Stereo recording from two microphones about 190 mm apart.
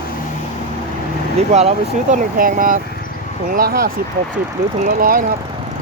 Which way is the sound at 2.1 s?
45° right (ahead or behind).